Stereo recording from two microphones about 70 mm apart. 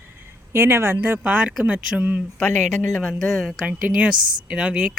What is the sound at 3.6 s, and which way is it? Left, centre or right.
Speech, centre.